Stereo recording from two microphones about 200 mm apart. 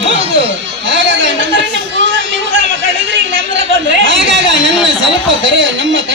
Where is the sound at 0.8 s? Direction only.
70° right (ahead or behind).